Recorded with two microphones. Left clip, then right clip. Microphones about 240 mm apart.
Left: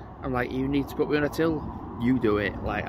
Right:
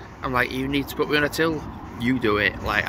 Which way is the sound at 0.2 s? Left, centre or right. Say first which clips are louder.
Right 5 dB; centre.